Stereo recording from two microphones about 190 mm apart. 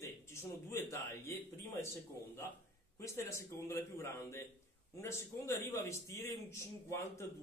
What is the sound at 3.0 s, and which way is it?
A man's voice, 15° left (ahead or behind).